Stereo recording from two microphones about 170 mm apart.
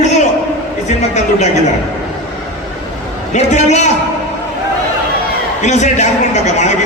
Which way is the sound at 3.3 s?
45° left (ahead or behind).